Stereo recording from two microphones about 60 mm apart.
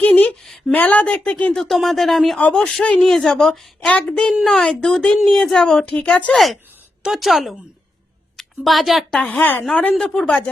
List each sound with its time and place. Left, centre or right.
0.0 s a sound: left
0.7 s speech: left
1.5 s speech: centre
3.8 s speech: centre
5.8 s speech: centre
6.3 s a woman's voice: centre
9.4 s a woman's voice: left
9.9 s speech: centre
10.2 s speech: left